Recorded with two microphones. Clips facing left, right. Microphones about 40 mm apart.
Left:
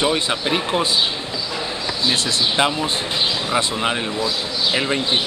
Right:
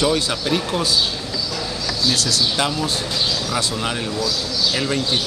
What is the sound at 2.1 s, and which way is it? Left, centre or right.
Speech, left.